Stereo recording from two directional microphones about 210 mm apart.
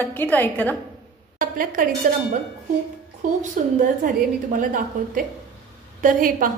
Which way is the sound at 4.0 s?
40° right (ahead or behind).